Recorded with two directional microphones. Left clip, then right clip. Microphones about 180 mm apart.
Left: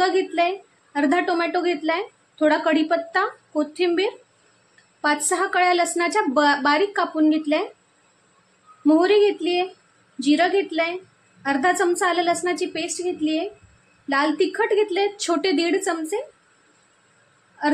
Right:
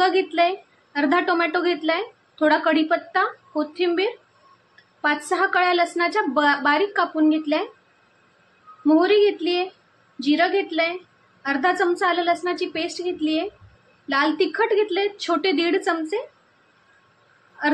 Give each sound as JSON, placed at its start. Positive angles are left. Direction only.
{"t": 0.0, "sound": "a woman's voice", "side_deg": 15}
{"t": 8.8, "sound": "a woman's voice", "side_deg": 20}